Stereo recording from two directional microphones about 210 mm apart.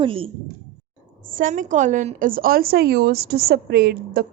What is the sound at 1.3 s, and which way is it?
A woman's voice, 40° right (ahead or behind).